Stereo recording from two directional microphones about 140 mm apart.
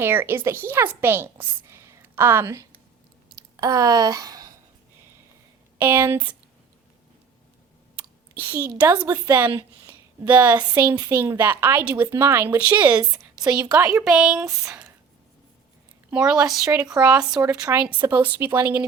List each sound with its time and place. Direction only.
0.0 s a woman's voice: 15° right (ahead or behind)
5.7 s speech: 15° right (ahead or behind)
8.4 s a woman's voice: 15° right (ahead or behind)
13.0 s a sound: 25° right (ahead or behind)
13.5 s speech: 10° right (ahead or behind)
16.0 s a woman's voice: 10° right (ahead or behind)
16.9 s speech: 25° right (ahead or behind)